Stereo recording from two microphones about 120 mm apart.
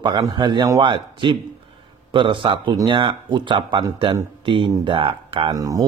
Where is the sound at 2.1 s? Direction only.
45° right (ahead or behind).